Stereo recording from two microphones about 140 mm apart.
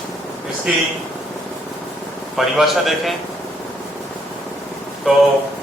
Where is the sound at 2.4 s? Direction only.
Centre (ahead or behind).